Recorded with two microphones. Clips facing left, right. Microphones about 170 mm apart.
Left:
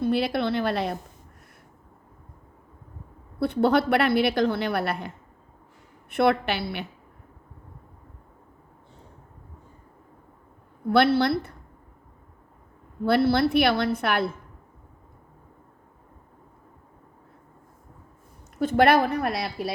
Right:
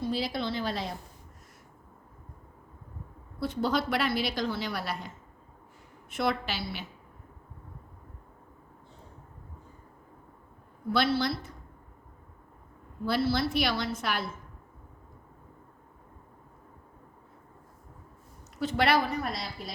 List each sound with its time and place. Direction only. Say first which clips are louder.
0.0 s a woman's voice: left 7 dB; 60° left (ahead or behind)
3.4 s a woman's voice: left 8 dB; 60° left (ahead or behind)
10.8 s a woman's voice: left 7 dB; 60° left (ahead or behind)
13.1 s a woman's voice: left 7 dB; 60° left (ahead or behind)
18.6 s a woman's voice: left 7 dB; 50° left (ahead or behind); by 19.7 s 65° left (ahead or behind)